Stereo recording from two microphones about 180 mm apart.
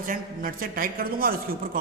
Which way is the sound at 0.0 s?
50° right (ahead or behind).